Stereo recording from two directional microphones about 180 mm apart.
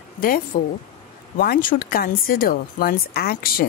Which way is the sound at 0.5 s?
45° left (ahead or behind).